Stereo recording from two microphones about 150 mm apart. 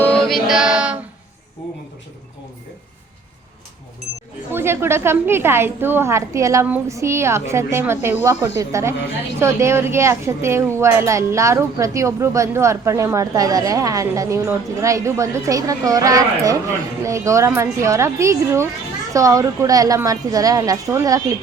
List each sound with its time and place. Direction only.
0.0 s music: 5° left (ahead or behind)
4.5 s a woman's voice: 15° right (ahead or behind)